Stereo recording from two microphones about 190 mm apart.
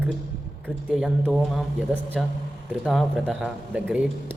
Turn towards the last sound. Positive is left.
turn(degrees=-10)  # may be behind; listen again after turning